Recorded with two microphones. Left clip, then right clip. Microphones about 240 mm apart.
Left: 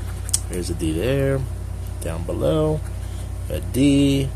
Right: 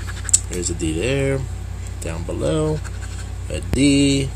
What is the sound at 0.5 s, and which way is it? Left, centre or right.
Speech, centre.